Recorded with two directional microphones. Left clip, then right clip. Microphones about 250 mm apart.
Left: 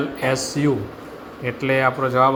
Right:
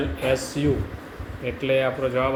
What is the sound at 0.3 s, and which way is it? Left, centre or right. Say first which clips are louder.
Speech: left 2 dB; centre.